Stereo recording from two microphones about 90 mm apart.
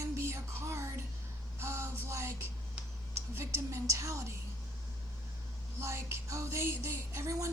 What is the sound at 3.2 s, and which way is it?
A woman's voice, 35° right (ahead or behind).